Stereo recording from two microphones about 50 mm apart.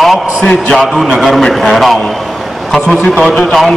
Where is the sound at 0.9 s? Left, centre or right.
Centre.